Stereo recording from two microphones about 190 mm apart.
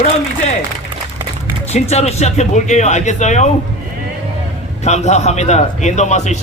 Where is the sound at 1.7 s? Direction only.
35° left (ahead or behind).